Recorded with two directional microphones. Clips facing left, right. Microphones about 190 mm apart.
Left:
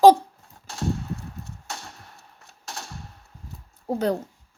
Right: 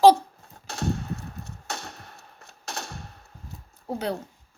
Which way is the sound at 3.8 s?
45° left (ahead or behind).